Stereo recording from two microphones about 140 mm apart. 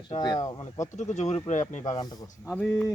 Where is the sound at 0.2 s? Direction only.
30° left (ahead or behind).